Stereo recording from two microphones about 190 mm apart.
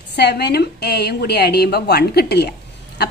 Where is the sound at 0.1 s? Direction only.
60° left (ahead or behind).